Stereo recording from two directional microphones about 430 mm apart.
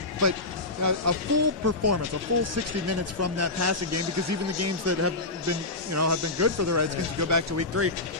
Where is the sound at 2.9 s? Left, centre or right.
Right.